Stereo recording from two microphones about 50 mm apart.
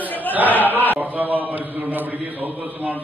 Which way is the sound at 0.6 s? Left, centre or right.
Right.